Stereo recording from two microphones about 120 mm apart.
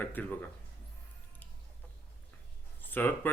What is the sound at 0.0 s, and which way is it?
Speech, 15° left (ahead or behind).